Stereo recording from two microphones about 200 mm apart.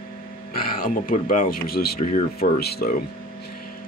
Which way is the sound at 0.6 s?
45° left (ahead or behind).